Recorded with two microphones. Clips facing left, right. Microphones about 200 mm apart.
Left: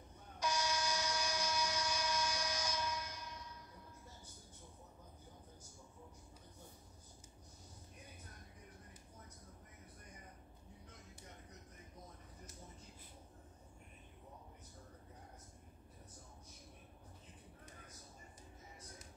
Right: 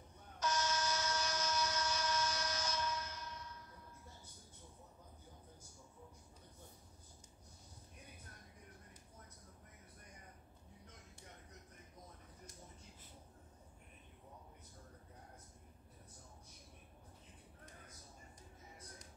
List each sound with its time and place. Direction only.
0.4 s train: 10° left (ahead or behind)